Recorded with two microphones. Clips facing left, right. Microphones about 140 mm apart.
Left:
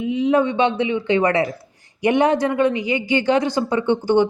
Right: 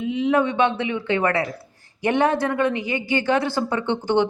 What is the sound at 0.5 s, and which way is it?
A woman's voice, 15° left (ahead or behind).